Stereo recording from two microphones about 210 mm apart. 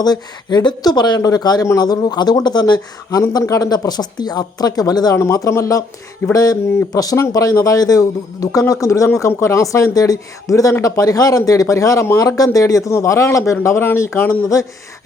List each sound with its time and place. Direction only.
0.0 s speech: 20° left (ahead or behind)